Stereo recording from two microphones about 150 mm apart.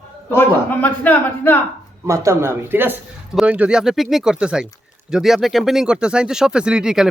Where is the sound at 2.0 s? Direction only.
20° right (ahead or behind).